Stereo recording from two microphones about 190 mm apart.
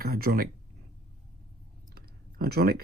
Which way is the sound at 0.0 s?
55° right (ahead or behind).